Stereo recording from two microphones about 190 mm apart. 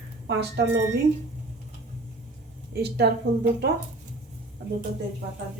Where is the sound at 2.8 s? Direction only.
60° right (ahead or behind).